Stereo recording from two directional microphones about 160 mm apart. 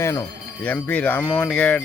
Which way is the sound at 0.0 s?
15° left (ahead or behind).